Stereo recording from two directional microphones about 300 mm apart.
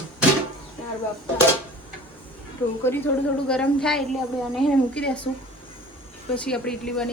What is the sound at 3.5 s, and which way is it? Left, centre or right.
A woman's voice, centre.